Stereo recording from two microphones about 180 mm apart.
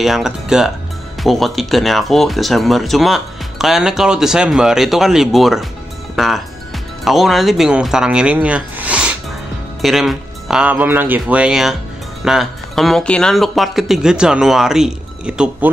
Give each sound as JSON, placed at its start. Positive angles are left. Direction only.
{"t": 0.0, "sound": "speech", "side_deg": 0}